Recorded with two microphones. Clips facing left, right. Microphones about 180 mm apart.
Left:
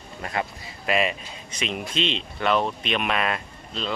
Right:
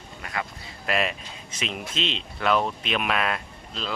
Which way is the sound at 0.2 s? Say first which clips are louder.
Left 4 dB; 30° left (ahead or behind).